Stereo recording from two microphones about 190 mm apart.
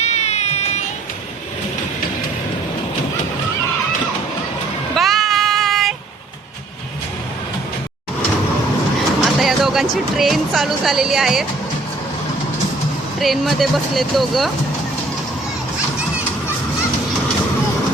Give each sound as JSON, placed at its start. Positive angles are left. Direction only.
{"t": 0.0, "sound": "a sound", "side_deg": 35}
{"t": 4.9, "sound": "child singing", "side_deg": 0}
{"t": 9.2, "sound": "bird", "side_deg": 0}
{"t": 9.9, "sound": "speech", "side_deg": 0}
{"t": 13.1, "sound": "speech", "side_deg": 0}